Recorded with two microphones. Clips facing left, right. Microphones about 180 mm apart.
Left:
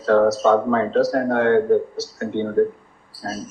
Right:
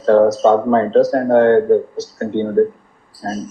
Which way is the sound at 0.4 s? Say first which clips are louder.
Right 4 dB; 30° right (ahead or behind).